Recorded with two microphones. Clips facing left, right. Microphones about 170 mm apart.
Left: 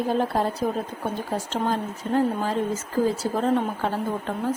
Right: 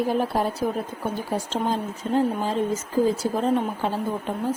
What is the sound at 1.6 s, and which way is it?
A woman's voice, 15° right (ahead or behind).